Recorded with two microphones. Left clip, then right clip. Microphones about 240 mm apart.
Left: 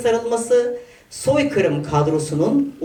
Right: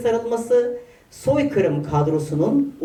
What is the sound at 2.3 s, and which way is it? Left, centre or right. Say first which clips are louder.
Speech: left 1 dB; centre.